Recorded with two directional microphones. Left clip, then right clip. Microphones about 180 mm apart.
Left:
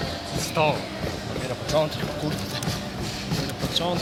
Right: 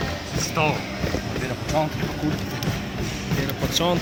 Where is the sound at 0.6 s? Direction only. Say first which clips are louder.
Left 1 dB; 50° left (ahead or behind).